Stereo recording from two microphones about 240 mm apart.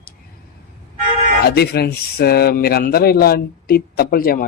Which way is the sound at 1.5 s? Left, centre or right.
Left.